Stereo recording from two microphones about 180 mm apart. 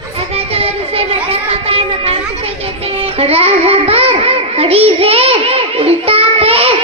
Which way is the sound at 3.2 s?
35° right (ahead or behind).